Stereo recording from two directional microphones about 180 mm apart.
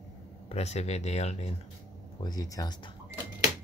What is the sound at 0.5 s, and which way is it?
Speech, 35° left (ahead or behind).